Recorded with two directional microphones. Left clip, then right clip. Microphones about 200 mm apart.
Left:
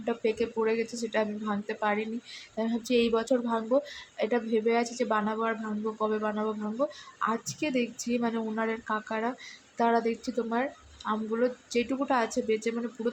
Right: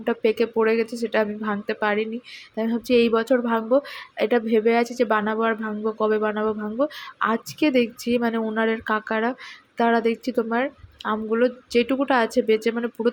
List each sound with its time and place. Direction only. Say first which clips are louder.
0.0 s speech: right 7 dB; 20° right (ahead or behind)